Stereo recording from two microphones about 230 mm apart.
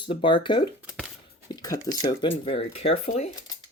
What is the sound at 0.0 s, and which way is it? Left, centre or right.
Speech, left.